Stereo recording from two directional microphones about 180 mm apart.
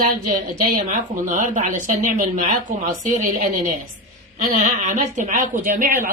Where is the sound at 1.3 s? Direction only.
40° right (ahead or behind).